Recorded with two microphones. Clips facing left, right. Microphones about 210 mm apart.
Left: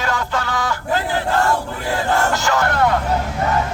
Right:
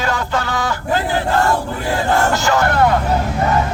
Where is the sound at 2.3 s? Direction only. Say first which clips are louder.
Right 3 dB; 30° right (ahead or behind).